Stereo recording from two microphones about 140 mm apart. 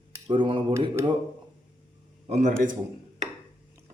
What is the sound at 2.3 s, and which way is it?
Speech, 60° right (ahead or behind).